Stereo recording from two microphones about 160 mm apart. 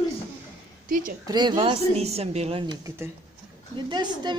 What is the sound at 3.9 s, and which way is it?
Speech, 25° right (ahead or behind).